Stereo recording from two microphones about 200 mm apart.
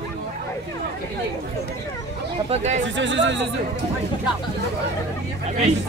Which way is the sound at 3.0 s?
65° right (ahead or behind).